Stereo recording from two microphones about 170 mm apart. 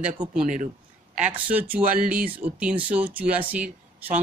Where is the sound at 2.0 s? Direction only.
55° right (ahead or behind).